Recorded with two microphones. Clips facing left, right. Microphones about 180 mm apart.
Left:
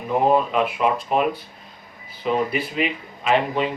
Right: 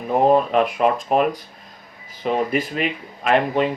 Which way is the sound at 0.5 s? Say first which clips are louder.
Right 3 dB; 45° right (ahead or behind).